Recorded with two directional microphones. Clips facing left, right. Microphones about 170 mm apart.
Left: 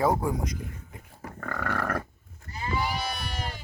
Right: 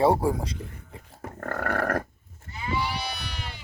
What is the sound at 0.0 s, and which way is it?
Speech, 30° right (ahead or behind).